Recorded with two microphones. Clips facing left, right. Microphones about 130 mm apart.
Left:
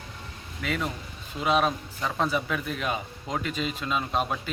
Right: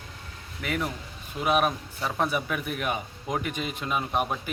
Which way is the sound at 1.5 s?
15° right (ahead or behind).